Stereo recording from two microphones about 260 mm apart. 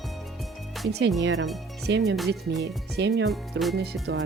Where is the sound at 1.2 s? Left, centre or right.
Right.